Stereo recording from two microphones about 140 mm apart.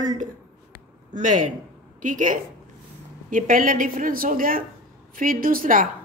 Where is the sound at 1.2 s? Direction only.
60° right (ahead or behind); by 5.8 s 85° right.